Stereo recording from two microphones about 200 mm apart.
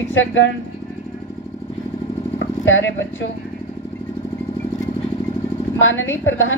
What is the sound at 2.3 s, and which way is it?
Speech, 70° left (ahead or behind).